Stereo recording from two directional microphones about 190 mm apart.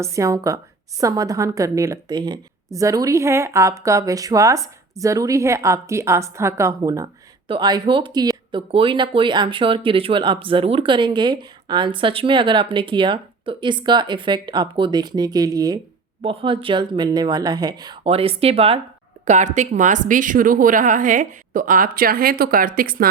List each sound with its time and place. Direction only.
0.0 s a woman's voice: 15° right (ahead or behind); by 23.0 s 50° right (ahead or behind)